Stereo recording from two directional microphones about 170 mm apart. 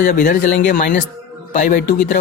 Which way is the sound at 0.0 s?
50° left (ahead or behind).